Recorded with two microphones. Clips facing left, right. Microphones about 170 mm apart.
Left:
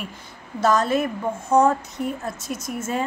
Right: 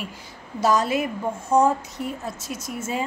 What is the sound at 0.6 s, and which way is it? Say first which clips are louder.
A woman's voice: left 1 dB; 10° right (ahead or behind).